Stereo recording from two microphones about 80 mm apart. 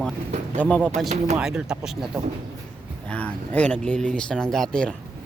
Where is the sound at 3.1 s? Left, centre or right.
Centre.